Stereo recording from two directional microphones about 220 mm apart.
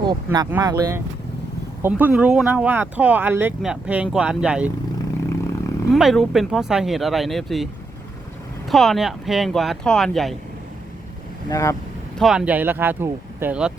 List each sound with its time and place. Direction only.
0.0 s speech: 20° right (ahead or behind)
5.9 s speech: centre (ahead or behind)
8.7 s speech: centre (ahead or behind)
11.4 s speech: 15° left (ahead or behind)
12.2 s speech: centre (ahead or behind)